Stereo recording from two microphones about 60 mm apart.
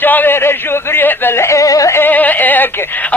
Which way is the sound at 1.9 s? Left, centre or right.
Left.